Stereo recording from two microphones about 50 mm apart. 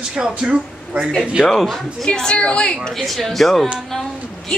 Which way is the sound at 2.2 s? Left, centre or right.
Centre.